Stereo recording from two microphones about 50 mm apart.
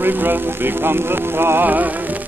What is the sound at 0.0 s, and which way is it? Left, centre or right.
Speech, right.